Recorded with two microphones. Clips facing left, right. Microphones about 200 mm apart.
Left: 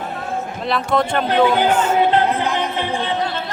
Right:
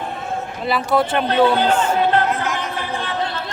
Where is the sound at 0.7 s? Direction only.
5° right (ahead or behind).